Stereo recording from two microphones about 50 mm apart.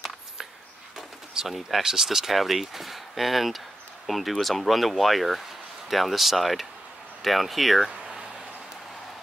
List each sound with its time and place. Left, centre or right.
1.5 s speech: centre